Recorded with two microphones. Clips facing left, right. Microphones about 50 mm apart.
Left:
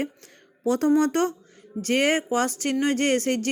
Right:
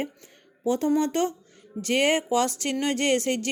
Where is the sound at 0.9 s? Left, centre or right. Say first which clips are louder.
Left 3 dB; left.